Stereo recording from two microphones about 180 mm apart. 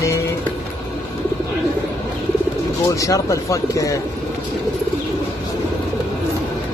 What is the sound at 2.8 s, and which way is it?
Speech, 20° left (ahead or behind).